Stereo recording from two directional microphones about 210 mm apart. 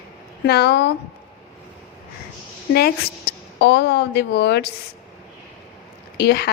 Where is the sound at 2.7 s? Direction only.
50° left (ahead or behind).